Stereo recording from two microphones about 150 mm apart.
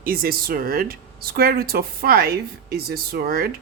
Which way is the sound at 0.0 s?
75° right (ahead or behind).